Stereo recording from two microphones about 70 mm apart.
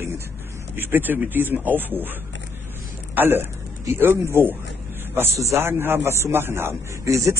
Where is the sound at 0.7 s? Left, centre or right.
Right.